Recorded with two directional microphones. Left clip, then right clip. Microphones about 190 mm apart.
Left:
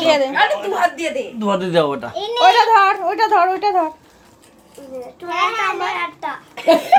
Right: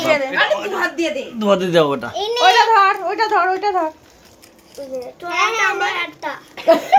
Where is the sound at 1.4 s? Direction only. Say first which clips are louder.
Right 3 dB; 15° right (ahead or behind).